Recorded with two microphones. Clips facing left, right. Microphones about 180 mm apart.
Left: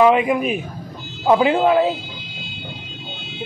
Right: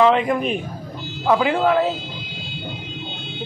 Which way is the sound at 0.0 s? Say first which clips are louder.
Left 2 dB; 10° left (ahead or behind).